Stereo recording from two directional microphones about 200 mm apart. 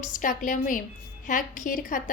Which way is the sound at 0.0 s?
40° left (ahead or behind).